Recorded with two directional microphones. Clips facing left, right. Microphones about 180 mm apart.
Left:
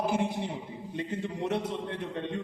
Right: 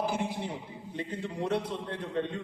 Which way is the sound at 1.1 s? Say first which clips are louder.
Even; 20° left (ahead or behind).